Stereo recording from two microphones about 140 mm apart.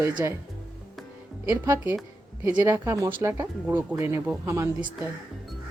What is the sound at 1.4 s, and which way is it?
Speech, 20° right (ahead or behind).